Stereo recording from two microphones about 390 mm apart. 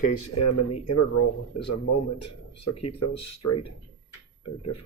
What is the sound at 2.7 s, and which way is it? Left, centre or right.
Speech, left.